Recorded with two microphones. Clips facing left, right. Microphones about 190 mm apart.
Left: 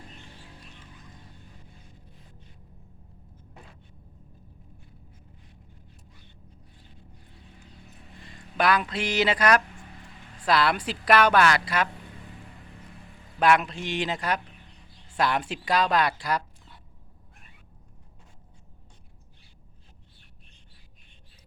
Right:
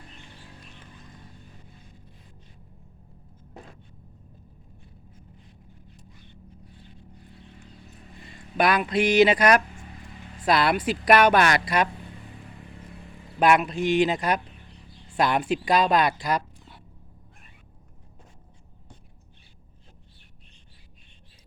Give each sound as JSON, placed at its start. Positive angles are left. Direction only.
{"t": 8.5, "sound": "a woman's voice", "side_deg": -15}
{"t": 13.4, "sound": "a woman's voice", "side_deg": -15}